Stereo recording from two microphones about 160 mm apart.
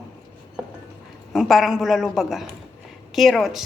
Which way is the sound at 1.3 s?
Centre (ahead or behind).